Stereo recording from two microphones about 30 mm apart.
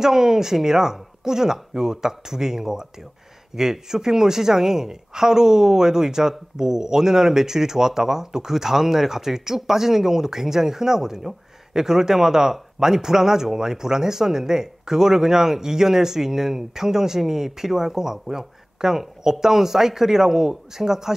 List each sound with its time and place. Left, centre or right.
0.0 s speech: centre